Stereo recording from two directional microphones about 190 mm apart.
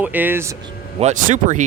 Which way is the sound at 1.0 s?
40° right (ahead or behind).